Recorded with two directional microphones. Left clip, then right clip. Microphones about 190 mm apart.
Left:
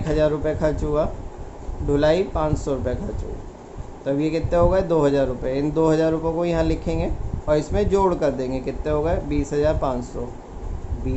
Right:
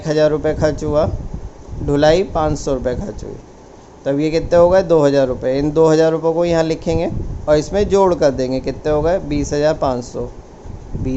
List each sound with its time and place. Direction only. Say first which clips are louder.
0.0 s speech: right 6 dB; 45° right (ahead or behind)
4.0 s speech: right 6 dB; 45° right (ahead or behind)